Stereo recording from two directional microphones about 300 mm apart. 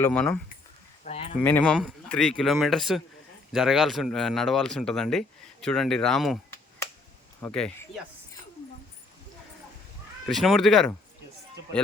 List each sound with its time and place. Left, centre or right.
0.0 s speech: centre
1.0 s a sound: left
1.4 s speech: centre
10.2 s speech: centre